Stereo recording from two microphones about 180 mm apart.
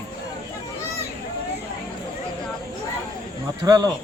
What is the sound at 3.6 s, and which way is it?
Speech, 20° right (ahead or behind).